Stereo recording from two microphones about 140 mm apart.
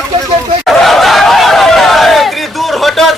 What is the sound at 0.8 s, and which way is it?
Speech, centre (ahead or behind).